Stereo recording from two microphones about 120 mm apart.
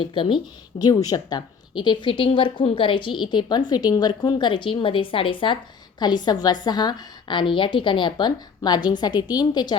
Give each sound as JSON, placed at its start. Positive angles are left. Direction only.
{"t": 0.0, "sound": "a woman's voice", "side_deg": 45}